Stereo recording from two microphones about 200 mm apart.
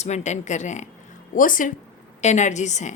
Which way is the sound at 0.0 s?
35° left (ahead or behind).